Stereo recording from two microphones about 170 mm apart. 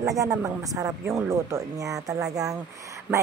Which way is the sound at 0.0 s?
20° right (ahead or behind).